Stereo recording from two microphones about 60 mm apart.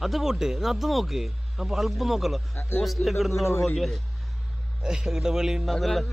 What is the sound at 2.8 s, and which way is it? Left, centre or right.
Speech, centre.